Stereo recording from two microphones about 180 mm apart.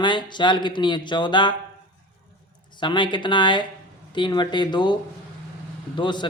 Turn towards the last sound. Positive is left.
turn(degrees=25)  # may be behind; listen again after turning